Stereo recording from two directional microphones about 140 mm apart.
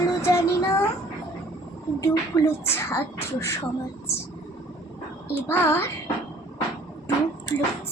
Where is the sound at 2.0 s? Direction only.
20° left (ahead or behind).